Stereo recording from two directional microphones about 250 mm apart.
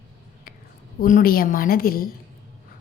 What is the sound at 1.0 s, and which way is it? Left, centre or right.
A woman's voice, left.